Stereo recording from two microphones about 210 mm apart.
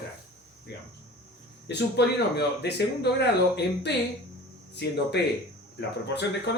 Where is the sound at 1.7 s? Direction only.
55° left (ahead or behind).